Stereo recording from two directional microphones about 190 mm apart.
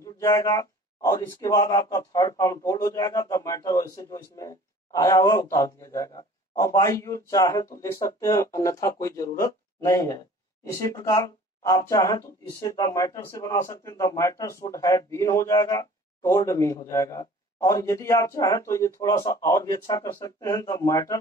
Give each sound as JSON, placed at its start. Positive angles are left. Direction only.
{"t": 0.0, "sound": "speech", "side_deg": 15}